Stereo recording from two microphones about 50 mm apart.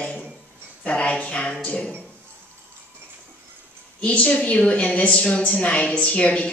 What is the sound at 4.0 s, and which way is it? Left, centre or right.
A woman's voice, left.